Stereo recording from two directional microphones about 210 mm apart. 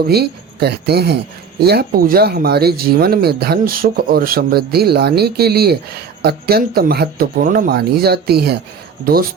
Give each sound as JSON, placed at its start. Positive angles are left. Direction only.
{"t": 0.0, "sound": "speech", "side_deg": -50}